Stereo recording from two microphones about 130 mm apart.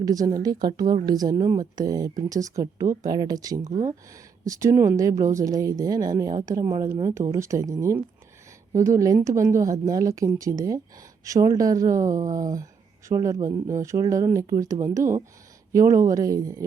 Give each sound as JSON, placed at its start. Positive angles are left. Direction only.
{"t": 0.0, "sound": "speech", "side_deg": -30}
{"t": 3.6, "sound": "speech", "side_deg": -65}
{"t": 4.4, "sound": "speech", "side_deg": -25}